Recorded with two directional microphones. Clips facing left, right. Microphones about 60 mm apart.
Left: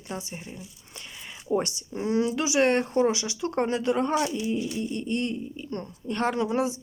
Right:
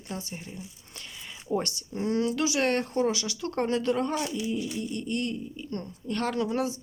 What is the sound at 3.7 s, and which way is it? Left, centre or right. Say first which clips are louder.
Speech: right 2 dB; centre.